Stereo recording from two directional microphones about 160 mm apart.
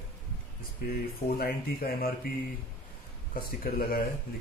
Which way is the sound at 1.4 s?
70° left (ahead or behind).